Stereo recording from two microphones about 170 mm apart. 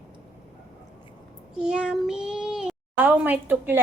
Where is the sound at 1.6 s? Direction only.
5° right (ahead or behind).